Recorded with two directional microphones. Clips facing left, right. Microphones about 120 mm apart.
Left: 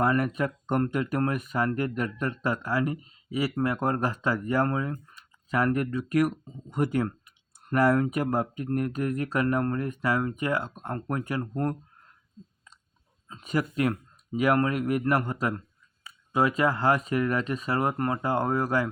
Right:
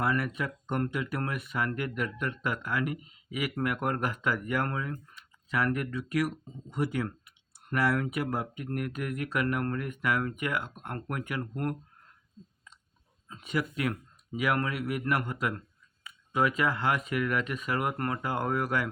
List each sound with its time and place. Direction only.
0.0 s speech: 45° left (ahead or behind)
13.4 s speech: 40° left (ahead or behind)